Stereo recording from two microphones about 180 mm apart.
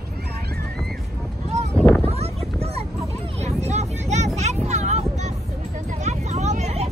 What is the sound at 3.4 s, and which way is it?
Vehicle, 40° right (ahead or behind).